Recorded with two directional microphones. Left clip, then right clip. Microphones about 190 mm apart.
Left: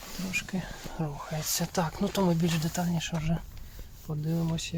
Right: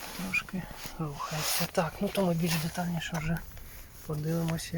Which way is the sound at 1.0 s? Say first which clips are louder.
Right 1 dB; 15° left (ahead or behind).